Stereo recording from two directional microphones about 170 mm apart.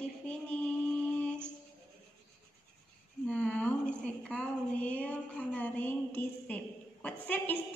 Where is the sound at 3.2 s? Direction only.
5° left (ahead or behind).